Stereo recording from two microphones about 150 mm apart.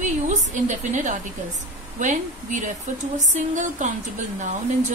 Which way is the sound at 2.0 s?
55° right (ahead or behind).